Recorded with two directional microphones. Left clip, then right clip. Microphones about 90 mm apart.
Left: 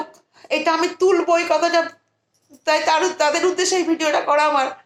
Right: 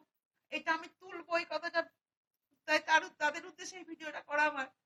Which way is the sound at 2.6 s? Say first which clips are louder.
Left 13 dB; 20° left (ahead or behind).